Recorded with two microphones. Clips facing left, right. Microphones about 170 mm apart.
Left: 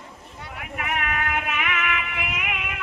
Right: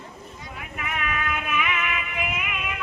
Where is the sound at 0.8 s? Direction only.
60° left (ahead or behind).